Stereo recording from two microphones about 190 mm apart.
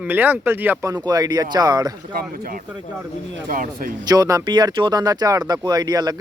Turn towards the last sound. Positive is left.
turn(degrees=-20)  # may be behind; listen again after turning